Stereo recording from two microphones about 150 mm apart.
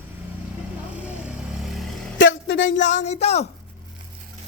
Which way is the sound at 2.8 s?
55° left (ahead or behind).